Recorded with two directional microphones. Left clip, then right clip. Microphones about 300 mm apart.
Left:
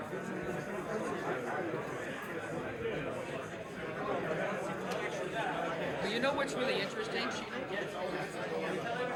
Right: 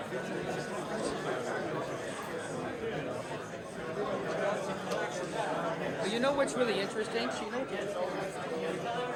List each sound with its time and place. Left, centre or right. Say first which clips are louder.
6.2 s speech: right 5 dB; right